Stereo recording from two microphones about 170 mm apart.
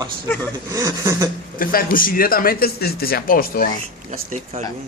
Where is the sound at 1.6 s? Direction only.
55° left (ahead or behind).